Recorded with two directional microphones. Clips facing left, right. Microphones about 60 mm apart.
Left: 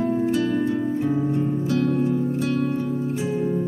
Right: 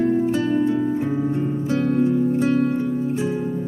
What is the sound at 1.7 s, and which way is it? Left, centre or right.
Music, centre.